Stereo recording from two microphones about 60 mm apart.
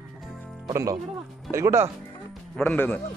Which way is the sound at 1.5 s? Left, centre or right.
Right.